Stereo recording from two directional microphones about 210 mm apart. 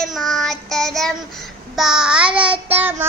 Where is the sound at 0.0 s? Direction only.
Centre (ahead or behind).